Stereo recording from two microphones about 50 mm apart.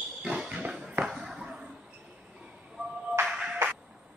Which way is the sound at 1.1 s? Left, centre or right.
Centre.